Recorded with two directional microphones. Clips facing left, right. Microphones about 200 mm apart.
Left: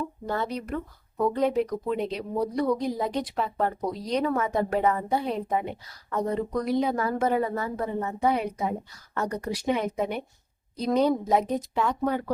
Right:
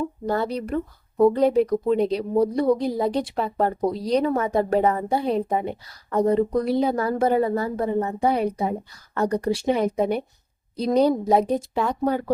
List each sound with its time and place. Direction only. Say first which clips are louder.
0.3 s speech: right 5 dB; 35° right (ahead or behind)